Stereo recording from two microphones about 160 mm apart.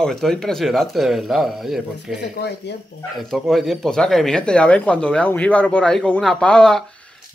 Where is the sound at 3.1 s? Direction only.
Centre (ahead or behind).